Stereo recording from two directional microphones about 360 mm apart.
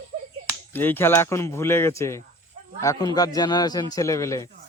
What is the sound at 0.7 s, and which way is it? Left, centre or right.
Speech, centre.